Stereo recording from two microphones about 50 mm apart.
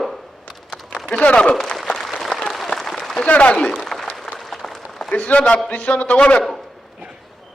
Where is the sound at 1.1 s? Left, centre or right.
Left.